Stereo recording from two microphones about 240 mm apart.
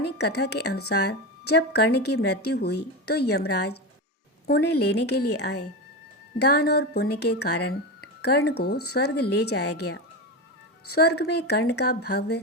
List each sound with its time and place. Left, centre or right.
0.0 s a woman's voice: left